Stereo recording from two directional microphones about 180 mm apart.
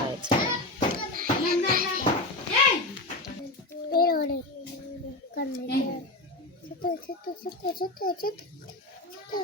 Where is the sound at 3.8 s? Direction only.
55° left (ahead or behind).